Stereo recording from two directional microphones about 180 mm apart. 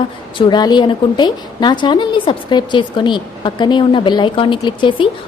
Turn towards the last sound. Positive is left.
turn(degrees=25)  # may be behind; listen again after turning